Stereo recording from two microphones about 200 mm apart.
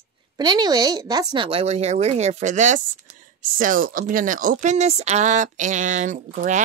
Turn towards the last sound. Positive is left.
turn(degrees=-40)  # may be behind; listen again after turning